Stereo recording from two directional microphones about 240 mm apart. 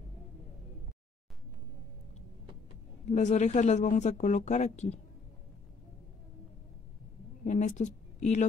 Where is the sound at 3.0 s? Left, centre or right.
Left.